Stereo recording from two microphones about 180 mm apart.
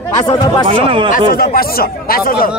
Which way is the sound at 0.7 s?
30° right (ahead or behind).